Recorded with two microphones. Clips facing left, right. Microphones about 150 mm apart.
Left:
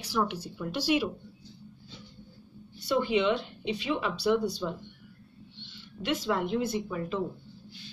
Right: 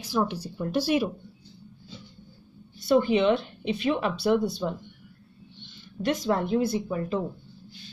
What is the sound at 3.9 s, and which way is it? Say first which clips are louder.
Speech: right 3 dB; 55° right (ahead or behind).